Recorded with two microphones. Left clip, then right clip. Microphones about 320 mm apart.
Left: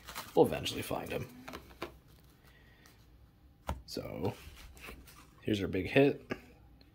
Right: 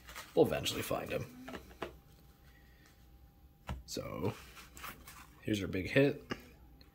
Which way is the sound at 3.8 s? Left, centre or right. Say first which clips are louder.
Right 3 dB; centre.